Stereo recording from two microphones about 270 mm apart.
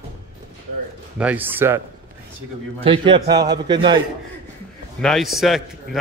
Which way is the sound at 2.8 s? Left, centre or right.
Centre.